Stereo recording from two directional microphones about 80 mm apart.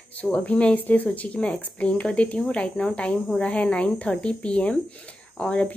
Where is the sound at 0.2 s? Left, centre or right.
Centre.